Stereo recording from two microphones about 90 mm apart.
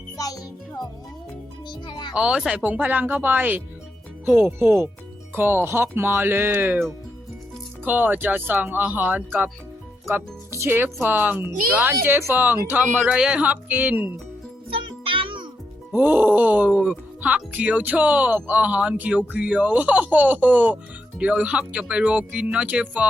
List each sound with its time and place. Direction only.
0.2 s music: 40° left (ahead or behind)
1.9 s music: 60° left (ahead or behind)
2.1 s speech: 10° right (ahead or behind)
4.6 s speech: 25° right (ahead or behind)
10.1 s speech: 30° right (ahead or behind)
13.1 s speech: 10° right (ahead or behind)
14.7 s music: 75° right (ahead or behind)
15.9 s speech: 20° right (ahead or behind)